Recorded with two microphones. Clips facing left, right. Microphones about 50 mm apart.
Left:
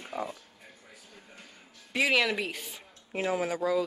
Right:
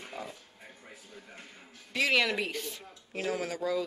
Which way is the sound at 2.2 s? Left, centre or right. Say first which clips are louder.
Left 1 dB; centre.